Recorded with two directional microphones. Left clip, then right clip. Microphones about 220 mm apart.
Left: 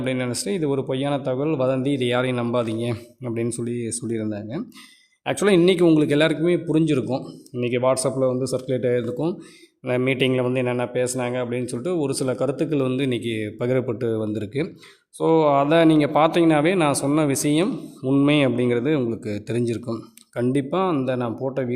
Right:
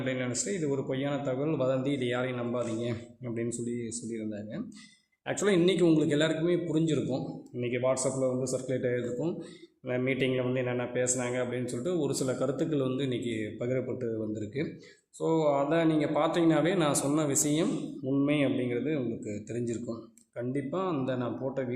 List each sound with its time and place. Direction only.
0.0 s a man's voice: 40° left (ahead or behind)